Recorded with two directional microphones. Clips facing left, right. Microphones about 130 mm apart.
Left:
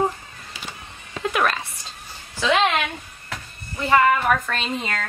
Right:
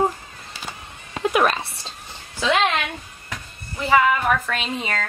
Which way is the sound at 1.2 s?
20° right (ahead or behind).